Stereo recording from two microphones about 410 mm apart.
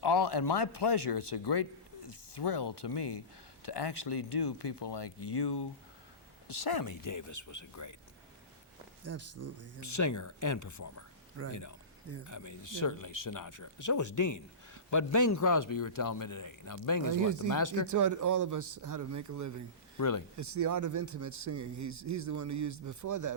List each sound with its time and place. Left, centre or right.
0.0 s speech: left
9.0 s speech: right
9.8 s speech: left
17.2 s speech: right
17.5 s speech: left
17.9 s speech: right
20.0 s speech: left
20.3 s speech: right